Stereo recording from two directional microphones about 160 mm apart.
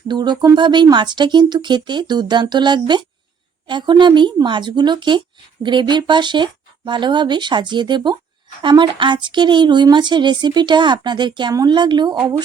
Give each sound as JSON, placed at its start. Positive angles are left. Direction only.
{"t": 0.1, "sound": "speech", "side_deg": -25}
{"t": 12.1, "sound": "a woman's voice", "side_deg": -10}